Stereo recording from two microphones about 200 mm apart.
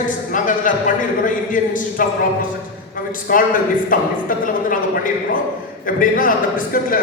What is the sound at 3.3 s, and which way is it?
Speech, 45° left (ahead or behind).